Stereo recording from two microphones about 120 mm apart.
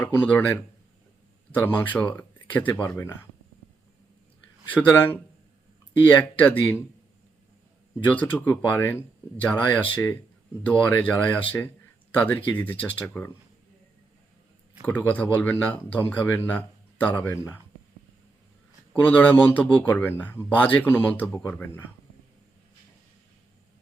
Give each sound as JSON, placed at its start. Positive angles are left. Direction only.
{"t": 0.0, "sound": "speech", "side_deg": 15}
{"t": 4.7, "sound": "speech", "side_deg": 15}
{"t": 8.1, "sound": "speech", "side_deg": 15}
{"t": 12.8, "sound": "speech", "side_deg": 10}
{"t": 14.8, "sound": "speech", "side_deg": 15}
{"t": 18.9, "sound": "speech", "side_deg": 15}